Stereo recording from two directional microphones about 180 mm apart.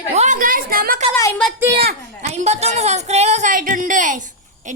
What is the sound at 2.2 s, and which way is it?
A woman's voice, 40° right (ahead or behind).